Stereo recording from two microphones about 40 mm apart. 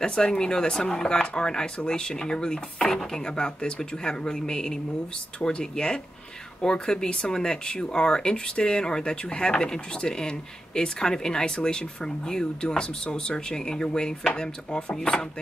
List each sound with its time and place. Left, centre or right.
0.0 s speech: left
15.0 s speech: centre